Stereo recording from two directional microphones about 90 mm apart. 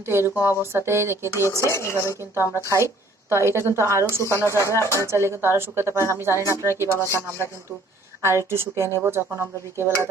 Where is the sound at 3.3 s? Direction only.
30° right (ahead or behind).